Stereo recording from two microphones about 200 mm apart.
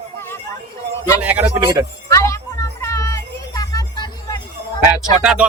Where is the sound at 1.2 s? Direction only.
10° right (ahead or behind).